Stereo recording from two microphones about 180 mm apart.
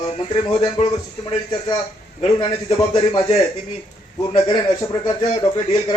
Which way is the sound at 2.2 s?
30° left (ahead or behind).